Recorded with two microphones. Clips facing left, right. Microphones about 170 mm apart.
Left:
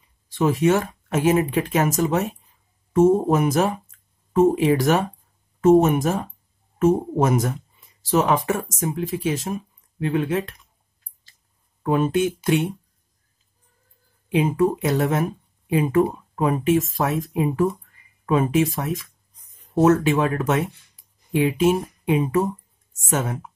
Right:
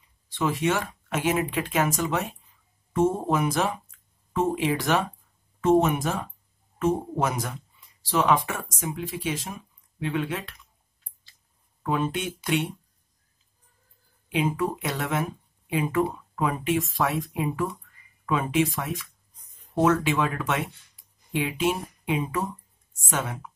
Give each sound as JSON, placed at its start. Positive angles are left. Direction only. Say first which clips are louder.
{"t": 0.3, "sound": "speech", "louder": "left 7 dB", "side_deg": 45}
{"t": 11.8, "sound": "speech", "louder": "left 7 dB", "side_deg": 45}
{"t": 14.3, "sound": "speech", "louder": "left 6 dB", "side_deg": 40}
{"t": 19.5, "sound": "a sound", "louder": "left 5 dB", "side_deg": 20}
{"t": 19.9, "sound": "speech", "louder": "left 6 dB", "side_deg": 45}